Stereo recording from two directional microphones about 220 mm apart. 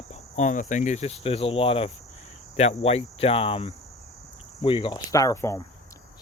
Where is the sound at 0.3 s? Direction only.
35° left (ahead or behind).